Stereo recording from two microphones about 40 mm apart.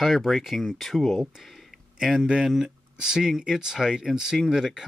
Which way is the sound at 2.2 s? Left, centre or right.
Centre.